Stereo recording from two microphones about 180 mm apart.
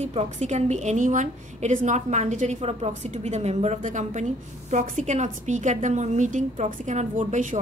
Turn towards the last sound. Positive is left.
turn(degrees=-45)  # may be behind; listen again after turning